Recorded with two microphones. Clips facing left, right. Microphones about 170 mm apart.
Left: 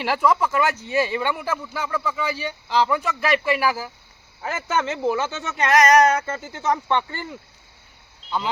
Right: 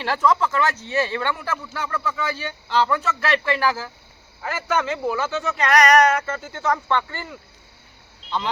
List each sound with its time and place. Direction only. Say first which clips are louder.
0.0 s speech: even; 10° left (ahead or behind)
4.4 s speech: right 1 dB; 25° left (ahead or behind)